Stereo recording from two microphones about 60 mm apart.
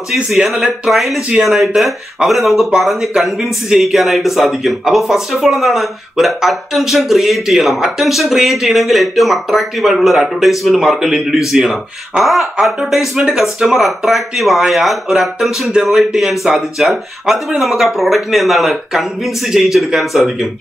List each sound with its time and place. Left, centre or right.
0.1 s a man's voice: centre
12.1 s speech: centre
12.6 s a man's voice: centre